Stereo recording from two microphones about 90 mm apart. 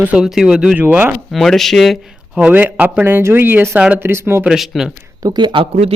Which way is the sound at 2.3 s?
15° right (ahead or behind).